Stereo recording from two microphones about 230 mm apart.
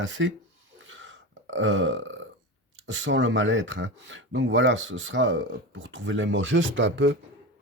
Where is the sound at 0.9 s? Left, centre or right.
Right.